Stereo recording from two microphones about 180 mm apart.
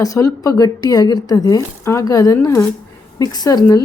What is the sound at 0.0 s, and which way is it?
A woman's voice, 20° left (ahead or behind).